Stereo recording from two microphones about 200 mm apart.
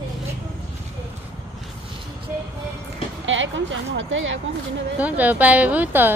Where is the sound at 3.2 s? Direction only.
70° right (ahead or behind).